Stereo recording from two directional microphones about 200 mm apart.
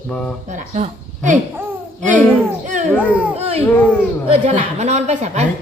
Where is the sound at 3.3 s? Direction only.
30° right (ahead or behind).